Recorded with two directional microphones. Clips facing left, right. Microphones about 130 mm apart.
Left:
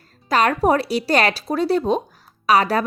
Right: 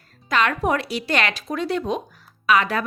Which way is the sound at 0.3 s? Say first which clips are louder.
Left 4 dB; 35° left (ahead or behind).